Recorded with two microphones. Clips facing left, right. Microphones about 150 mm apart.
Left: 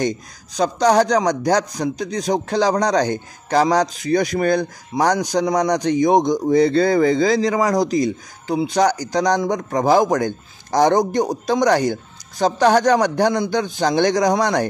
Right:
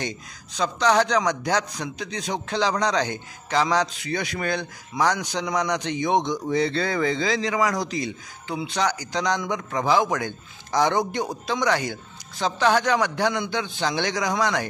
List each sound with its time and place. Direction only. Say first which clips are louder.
0.6 s a man's voice: left 5 dB; 40° left (ahead or behind)